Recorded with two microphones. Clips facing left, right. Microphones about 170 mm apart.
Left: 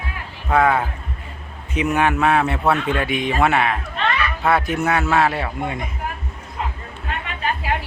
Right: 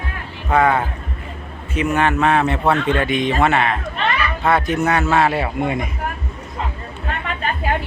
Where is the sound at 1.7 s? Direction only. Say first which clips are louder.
Right 1 dB; 15° left (ahead or behind); by 5.7 s 5° right (ahead or behind).